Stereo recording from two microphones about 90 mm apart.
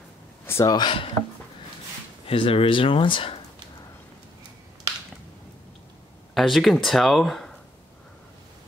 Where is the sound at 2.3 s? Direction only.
90° left.